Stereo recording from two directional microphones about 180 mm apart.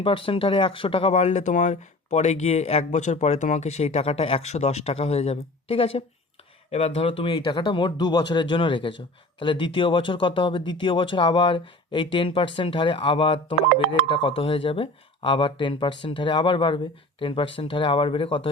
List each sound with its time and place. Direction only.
0.0 s speech: 30° left (ahead or behind)